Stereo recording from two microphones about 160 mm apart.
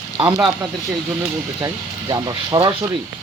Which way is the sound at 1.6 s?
25° right (ahead or behind).